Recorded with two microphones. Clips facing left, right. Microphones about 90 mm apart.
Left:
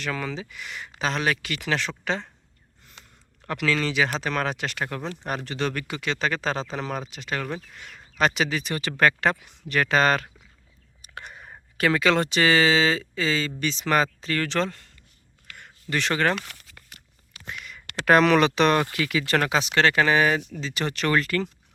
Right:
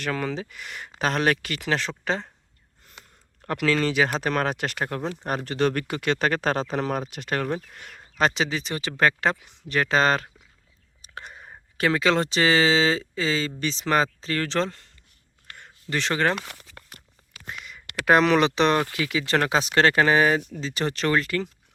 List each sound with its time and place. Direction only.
0.0 s speech: 45° right (ahead or behind)
8.2 s speech: 25° right (ahead or behind)
11.0 s a sound: 30° right (ahead or behind)
11.8 s speech: 25° right (ahead or behind)
18.0 s speech: 20° right (ahead or behind)
19.5 s speech: 35° right (ahead or behind)
21.1 s speech: 20° right (ahead or behind)